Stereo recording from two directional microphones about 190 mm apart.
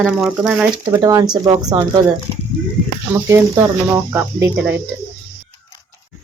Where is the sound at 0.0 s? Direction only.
5° right (ahead or behind).